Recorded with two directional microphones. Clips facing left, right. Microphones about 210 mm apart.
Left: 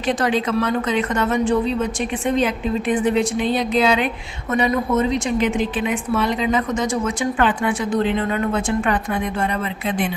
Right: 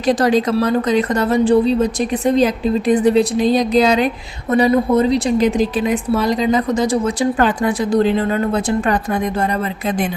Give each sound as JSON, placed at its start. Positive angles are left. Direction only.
{"t": 0.1, "sound": "a woman's voice", "side_deg": -40}